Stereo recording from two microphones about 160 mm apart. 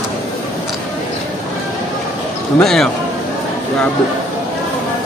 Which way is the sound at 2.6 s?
5° left (ahead or behind).